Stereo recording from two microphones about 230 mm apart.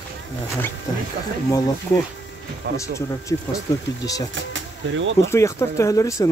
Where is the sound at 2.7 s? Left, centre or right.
Right.